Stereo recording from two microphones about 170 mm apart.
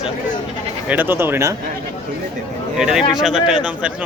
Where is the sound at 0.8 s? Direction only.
10° right (ahead or behind).